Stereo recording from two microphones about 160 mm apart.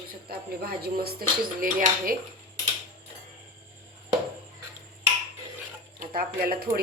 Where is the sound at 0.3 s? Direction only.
75° right (ahead or behind).